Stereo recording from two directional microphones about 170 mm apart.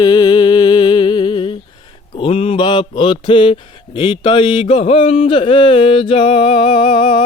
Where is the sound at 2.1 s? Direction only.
30° left (ahead or behind).